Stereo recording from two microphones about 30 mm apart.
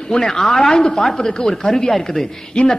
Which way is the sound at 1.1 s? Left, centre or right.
Left.